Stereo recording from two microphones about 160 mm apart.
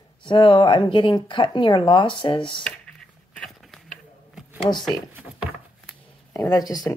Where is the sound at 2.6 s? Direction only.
5° left (ahead or behind); by 5.4 s 10° right (ahead or behind).